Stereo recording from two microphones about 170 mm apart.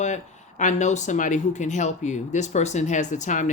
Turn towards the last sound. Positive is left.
turn(degrees=45)  # may be behind; listen again after turning